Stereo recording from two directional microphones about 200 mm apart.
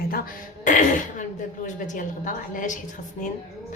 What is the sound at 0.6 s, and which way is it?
A woman's voice, 40° left (ahead or behind).